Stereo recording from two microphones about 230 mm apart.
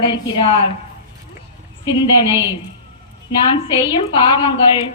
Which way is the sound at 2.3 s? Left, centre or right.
Centre.